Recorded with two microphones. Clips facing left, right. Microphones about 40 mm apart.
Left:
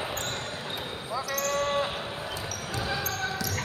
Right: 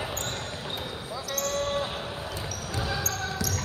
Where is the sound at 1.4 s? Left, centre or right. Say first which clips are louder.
Even; left.